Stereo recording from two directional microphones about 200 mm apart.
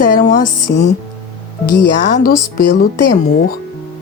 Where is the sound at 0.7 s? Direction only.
60° left (ahead or behind).